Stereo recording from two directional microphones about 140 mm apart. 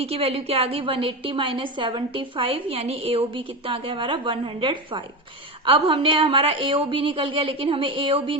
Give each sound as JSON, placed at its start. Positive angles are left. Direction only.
{"t": 0.0, "sound": "a woman's voice", "side_deg": -45}